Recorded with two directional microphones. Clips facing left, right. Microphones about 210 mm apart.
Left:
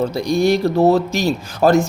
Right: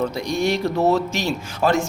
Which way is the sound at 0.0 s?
35° left (ahead or behind).